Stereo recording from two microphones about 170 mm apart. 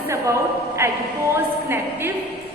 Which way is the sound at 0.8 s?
15° right (ahead or behind).